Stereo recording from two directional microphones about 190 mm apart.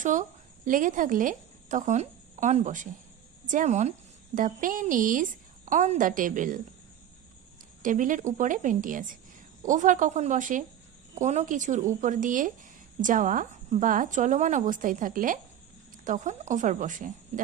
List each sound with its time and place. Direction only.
0.0 s a woman's voice: 40° right (ahead or behind)
7.8 s a woman's voice: 45° right (ahead or behind)